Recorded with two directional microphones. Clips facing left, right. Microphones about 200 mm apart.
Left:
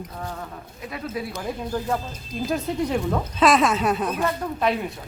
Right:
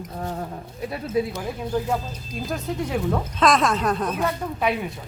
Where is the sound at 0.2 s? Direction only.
35° right (ahead or behind).